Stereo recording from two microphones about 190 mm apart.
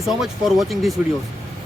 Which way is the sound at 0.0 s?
Centre (ahead or behind).